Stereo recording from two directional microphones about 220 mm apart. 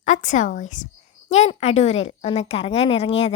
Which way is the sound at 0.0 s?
35° left (ahead or behind).